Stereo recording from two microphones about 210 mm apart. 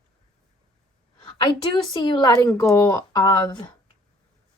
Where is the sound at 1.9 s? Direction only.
20° left (ahead or behind).